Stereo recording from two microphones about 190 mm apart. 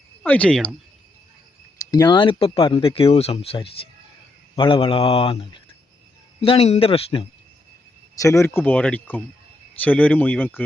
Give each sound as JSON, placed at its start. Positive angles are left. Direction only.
{"t": 0.2, "sound": "speech", "side_deg": 5}
{"t": 1.9, "sound": "speech", "side_deg": 20}
{"t": 8.2, "sound": "speech", "side_deg": 15}